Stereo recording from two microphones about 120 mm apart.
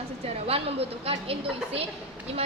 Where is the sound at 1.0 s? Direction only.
55° right (ahead or behind).